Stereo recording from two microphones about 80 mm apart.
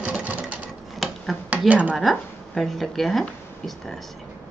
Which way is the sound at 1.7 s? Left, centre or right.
Centre.